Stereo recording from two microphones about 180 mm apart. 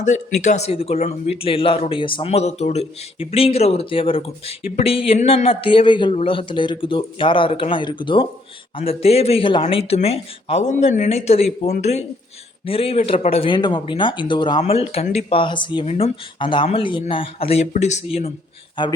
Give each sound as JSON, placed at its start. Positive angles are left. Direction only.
{"t": 0.0, "sound": "speech", "side_deg": 40}
{"t": 18.8, "sound": "speech", "side_deg": 25}